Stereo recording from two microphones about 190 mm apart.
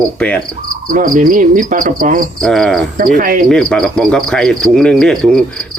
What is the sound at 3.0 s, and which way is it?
Cricket, 45° right (ahead or behind).